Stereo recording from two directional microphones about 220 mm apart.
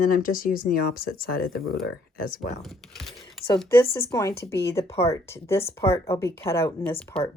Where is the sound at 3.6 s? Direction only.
10° left (ahead or behind).